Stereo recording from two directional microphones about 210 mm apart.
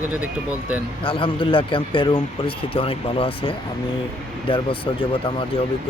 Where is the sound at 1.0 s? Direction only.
25° left (ahead or behind).